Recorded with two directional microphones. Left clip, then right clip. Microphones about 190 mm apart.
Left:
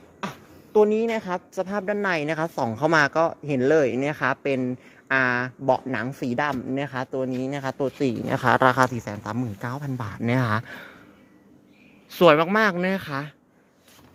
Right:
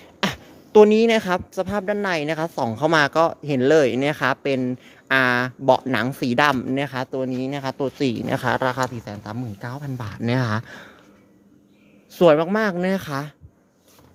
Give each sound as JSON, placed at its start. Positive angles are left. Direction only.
{"t": 0.2, "sound": "a woman's voice", "side_deg": -35}
{"t": 8.5, "sound": "speech", "side_deg": 15}
{"t": 12.1, "sound": "a woman's voice", "side_deg": -10}
{"t": 13.0, "sound": "speech", "side_deg": -25}